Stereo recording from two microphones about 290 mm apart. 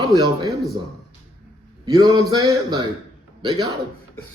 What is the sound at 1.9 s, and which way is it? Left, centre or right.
Speech, centre.